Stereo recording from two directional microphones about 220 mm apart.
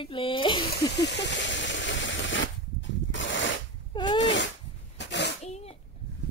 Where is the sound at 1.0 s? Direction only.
55° left (ahead or behind).